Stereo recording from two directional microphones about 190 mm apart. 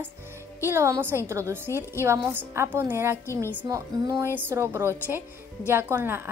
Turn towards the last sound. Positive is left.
turn(degrees=-10)  # may be behind; listen again after turning